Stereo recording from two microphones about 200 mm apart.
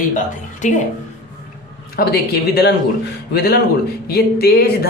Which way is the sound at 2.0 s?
55° left (ahead or behind).